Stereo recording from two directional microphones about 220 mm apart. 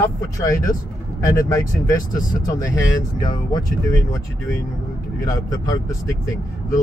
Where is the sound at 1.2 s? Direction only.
15° left (ahead or behind).